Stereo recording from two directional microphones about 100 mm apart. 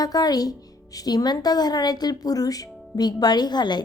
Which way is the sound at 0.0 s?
40° left (ahead or behind).